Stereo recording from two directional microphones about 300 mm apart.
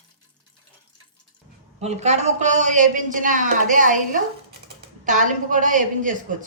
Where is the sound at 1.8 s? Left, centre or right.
Right.